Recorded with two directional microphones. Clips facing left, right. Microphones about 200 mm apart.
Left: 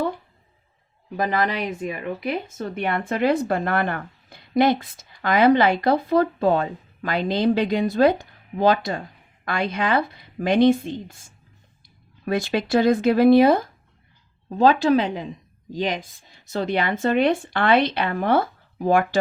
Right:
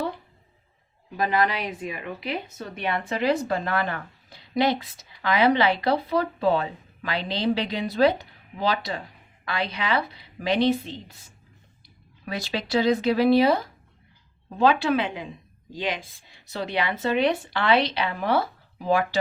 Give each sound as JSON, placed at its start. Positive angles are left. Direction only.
{"t": 1.5, "sound": "speech", "side_deg": 45}